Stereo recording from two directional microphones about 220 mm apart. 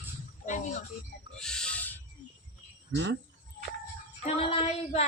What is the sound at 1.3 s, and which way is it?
Owl, 5° left (ahead or behind).